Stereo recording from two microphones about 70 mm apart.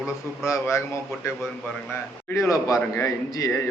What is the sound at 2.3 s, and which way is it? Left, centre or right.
Speech, left.